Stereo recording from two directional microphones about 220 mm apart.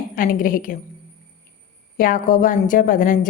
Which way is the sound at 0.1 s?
40° left (ahead or behind).